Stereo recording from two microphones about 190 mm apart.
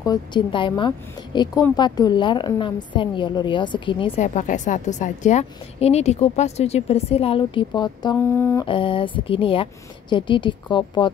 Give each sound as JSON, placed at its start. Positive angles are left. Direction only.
{"t": 0.0, "sound": "a woman's voice", "side_deg": 20}
{"t": 4.2, "sound": "a woman's voice", "side_deg": 40}
{"t": 8.2, "sound": "a sound", "side_deg": 10}
{"t": 8.6, "sound": "a woman's voice", "side_deg": 25}